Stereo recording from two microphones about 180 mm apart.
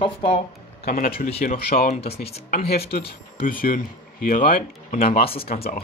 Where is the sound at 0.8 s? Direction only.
55° left (ahead or behind).